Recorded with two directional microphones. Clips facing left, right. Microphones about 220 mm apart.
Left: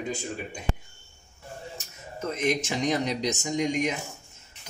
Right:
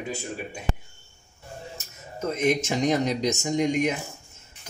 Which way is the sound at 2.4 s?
45° right (ahead or behind).